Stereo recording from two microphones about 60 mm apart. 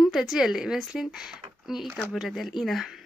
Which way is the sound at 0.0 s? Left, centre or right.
Centre.